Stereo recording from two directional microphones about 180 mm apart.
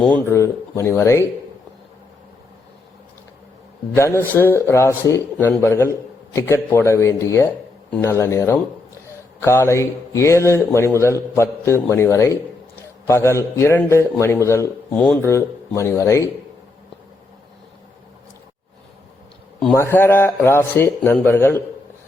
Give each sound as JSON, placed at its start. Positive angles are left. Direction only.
{"t": 0.2, "sound": "a man's voice", "side_deg": 15}
{"t": 3.9, "sound": "a man's voice", "side_deg": 15}
{"t": 15.2, "sound": "a man's voice", "side_deg": 15}
{"t": 19.7, "sound": "a man's voice", "side_deg": 15}